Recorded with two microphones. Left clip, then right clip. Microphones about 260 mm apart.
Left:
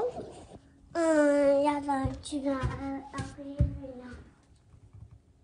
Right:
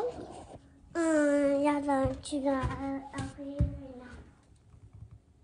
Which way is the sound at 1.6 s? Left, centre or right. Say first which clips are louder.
Left 1 dB; centre.